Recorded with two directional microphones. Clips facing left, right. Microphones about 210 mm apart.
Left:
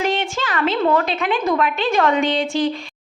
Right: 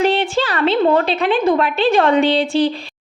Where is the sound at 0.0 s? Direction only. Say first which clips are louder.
Right 5 dB; 35° right (ahead or behind).